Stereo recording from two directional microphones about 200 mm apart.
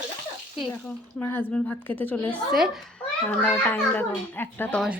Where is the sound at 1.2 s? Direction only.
10° left (ahead or behind).